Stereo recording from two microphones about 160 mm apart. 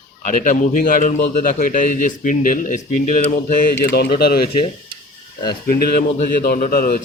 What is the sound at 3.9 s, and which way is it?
Speech, 90° left.